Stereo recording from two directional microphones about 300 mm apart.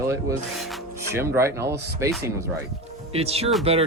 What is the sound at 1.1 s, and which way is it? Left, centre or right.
Speech, centre.